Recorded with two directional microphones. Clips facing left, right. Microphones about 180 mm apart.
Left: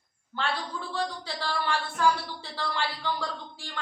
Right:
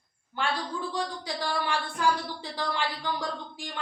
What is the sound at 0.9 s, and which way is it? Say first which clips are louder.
Speech: even; 15° right (ahead or behind).